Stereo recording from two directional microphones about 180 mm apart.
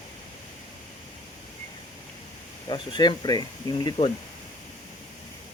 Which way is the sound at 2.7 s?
25° left (ahead or behind).